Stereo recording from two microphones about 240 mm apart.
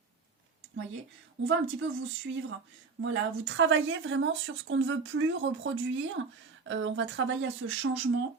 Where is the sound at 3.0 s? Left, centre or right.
Right.